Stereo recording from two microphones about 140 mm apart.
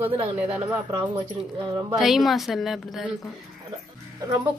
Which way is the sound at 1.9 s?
Centre (ahead or behind).